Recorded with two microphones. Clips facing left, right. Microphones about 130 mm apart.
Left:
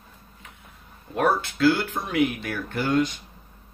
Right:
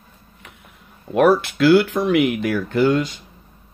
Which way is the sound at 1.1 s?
80° right.